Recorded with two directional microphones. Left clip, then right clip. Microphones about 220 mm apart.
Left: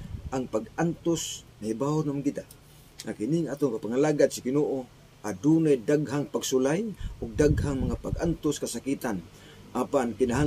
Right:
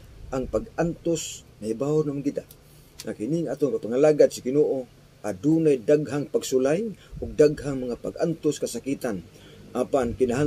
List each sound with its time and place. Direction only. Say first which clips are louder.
0.3 s a man's voice: right 3 dB; 10° left (ahead or behind)